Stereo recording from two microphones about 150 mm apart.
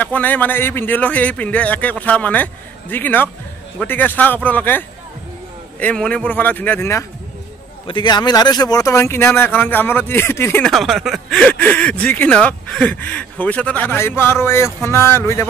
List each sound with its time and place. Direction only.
0.0 s speech: 10° left (ahead or behind)
7.8 s speech: 30° left (ahead or behind); by 10.6 s 15° left (ahead or behind)
10.6 s speech: centre (ahead or behind); by 15.4 s 15° left (ahead or behind)